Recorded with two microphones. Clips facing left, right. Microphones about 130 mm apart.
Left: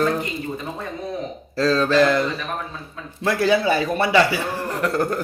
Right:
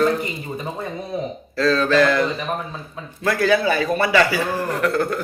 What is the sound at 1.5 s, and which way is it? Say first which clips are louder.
A man's voice: even; 35° left (ahead or behind).